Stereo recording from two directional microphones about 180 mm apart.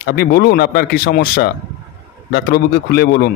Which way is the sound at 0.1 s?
60° left (ahead or behind).